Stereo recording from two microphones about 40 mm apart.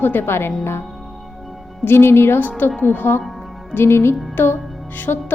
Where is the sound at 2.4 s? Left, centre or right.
Left.